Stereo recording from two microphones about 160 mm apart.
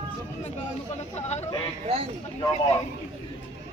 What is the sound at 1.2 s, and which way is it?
Speech, 45° left (ahead or behind).